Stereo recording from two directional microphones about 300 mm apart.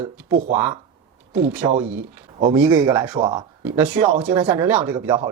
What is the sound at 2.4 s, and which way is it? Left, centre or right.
Speech, centre.